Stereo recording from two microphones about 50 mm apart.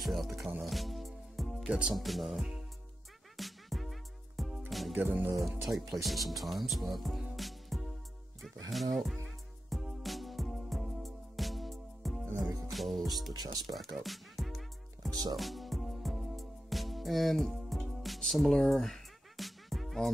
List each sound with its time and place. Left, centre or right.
0.0 s music: centre
1.7 s speech: right
2.0 s speech: centre
3.3 s music: centre
4.9 s speech: right
5.6 s speech: centre
7.3 s music: centre